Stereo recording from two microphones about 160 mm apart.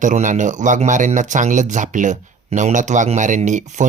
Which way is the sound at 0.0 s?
50° right (ahead or behind).